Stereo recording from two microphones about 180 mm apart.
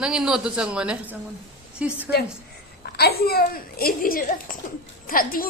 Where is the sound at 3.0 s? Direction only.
60° left (ahead or behind).